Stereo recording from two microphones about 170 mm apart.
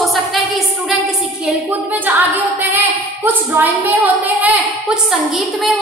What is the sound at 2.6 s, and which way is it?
A woman's voice, 10° right (ahead or behind).